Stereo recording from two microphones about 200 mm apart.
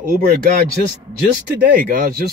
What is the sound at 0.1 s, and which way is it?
A man's voice, 45° right (ahead or behind).